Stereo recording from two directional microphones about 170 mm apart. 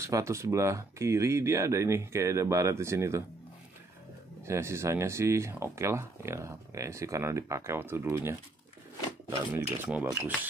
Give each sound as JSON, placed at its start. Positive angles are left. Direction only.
{"t": 0.0, "sound": "speech", "side_deg": -15}
{"t": 4.5, "sound": "speech", "side_deg": -15}
{"t": 9.5, "sound": "speech", "side_deg": -10}